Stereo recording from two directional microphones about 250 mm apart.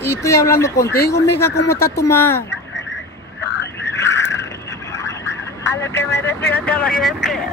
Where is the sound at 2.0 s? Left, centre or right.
Centre.